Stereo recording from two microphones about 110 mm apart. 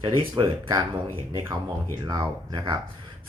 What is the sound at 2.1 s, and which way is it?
Speech, 40° right (ahead or behind).